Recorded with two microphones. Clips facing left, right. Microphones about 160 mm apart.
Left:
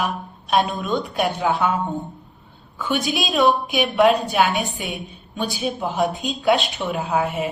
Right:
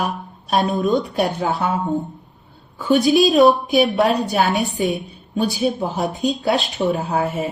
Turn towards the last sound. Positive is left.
turn(degrees=-40)  # may be behind; listen again after turning